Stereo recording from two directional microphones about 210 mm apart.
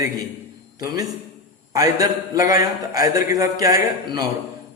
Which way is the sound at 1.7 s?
15° right (ahead or behind).